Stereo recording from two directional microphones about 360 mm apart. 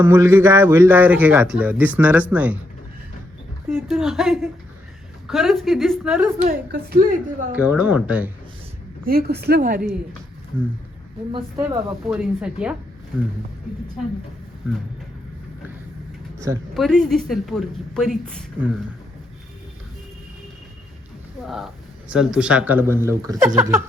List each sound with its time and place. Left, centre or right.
0.0 s a man's voice: centre
3.7 s a man's voice: centre
6.4 s a woman's voice: right
7.5 s a man's voice: centre
9.0 s a woman's voice: right
11.3 s a man's voice: centre
16.4 s a man's voice: centre
21.4 s a man's voice: centre
23.6 s a sound: centre